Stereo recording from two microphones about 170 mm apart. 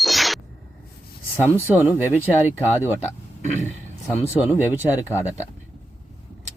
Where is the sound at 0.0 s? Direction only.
Centre (ahead or behind).